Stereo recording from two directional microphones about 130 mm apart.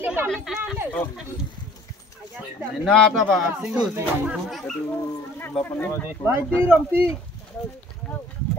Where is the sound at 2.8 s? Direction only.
Centre (ahead or behind).